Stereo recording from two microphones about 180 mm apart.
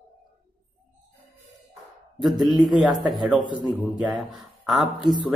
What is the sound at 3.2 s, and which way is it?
A man's voice, 5° right (ahead or behind).